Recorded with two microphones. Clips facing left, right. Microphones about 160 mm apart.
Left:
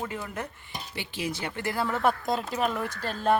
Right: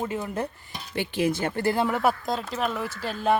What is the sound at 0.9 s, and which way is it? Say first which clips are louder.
Speech: right 9 dB; 50° right (ahead or behind).